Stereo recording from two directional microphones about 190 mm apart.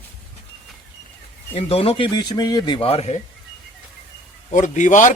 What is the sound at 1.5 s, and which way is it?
Speech, 30° left (ahead or behind).